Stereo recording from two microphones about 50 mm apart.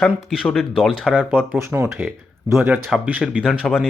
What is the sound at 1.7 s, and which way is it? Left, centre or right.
Speech, right.